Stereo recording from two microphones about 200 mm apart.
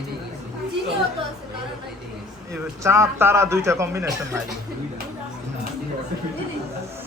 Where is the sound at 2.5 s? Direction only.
15° right (ahead or behind).